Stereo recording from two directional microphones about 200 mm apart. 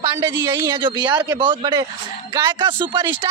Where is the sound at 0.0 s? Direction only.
20° right (ahead or behind).